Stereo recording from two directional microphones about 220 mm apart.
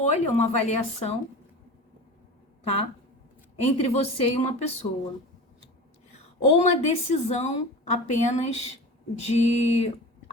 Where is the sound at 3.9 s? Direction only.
30° left (ahead or behind).